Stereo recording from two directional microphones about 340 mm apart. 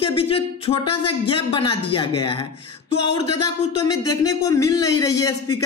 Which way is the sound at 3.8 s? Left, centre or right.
Centre.